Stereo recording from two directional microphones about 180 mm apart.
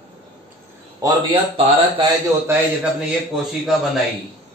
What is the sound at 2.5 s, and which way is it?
Speech, 5° right (ahead or behind).